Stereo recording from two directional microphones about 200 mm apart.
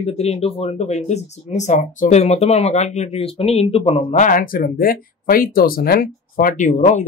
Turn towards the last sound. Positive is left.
turn(degrees=40)  # may be behind; listen again after turning